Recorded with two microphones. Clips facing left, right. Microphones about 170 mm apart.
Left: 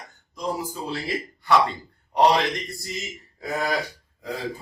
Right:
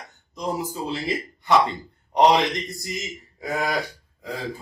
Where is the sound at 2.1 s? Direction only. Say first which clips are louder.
Right 1 dB; 20° right (ahead or behind).